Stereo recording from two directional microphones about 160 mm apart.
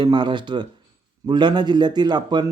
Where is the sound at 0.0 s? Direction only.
30° right (ahead or behind).